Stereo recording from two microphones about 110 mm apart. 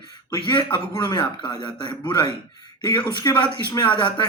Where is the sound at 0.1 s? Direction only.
45° left (ahead or behind).